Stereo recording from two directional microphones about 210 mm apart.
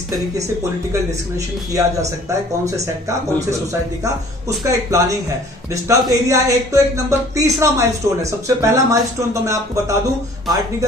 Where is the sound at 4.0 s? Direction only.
15° right (ahead or behind).